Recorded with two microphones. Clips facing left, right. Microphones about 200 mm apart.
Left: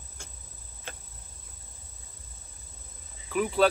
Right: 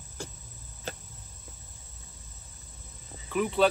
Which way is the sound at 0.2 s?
35° right (ahead or behind).